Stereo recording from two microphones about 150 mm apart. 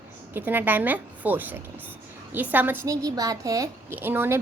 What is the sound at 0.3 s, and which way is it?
A woman's voice, 10° right (ahead or behind).